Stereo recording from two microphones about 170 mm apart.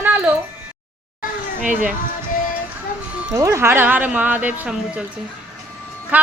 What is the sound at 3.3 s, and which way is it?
A woman's voice, 15° right (ahead or behind).